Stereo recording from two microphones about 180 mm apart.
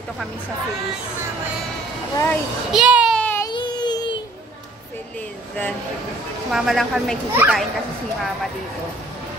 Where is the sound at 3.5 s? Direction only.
25° left (ahead or behind).